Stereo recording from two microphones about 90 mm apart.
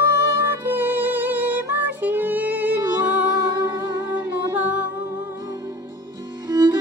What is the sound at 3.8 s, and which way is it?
Humming, 50° right (ahead or behind).